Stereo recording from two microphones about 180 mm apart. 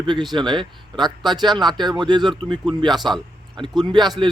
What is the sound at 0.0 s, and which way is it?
A man's voice, 25° right (ahead or behind).